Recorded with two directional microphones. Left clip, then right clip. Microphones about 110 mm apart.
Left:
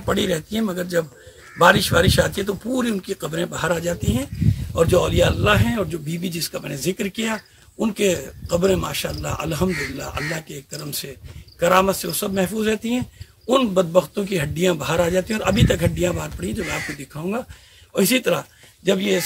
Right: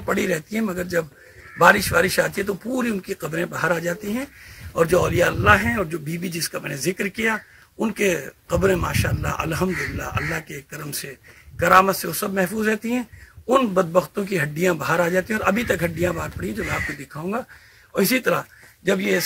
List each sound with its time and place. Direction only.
0.0 s speech: centre (ahead or behind); by 10.4 s 30° right (ahead or behind)
11.6 s speech: 15° right (ahead or behind); by 19.2 s 5° left (ahead or behind)